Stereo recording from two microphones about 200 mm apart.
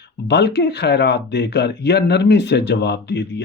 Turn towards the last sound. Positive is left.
turn(degrees=60)  # may be behind; listen again after turning